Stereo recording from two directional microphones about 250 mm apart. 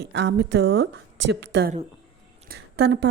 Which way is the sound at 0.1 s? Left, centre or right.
Right.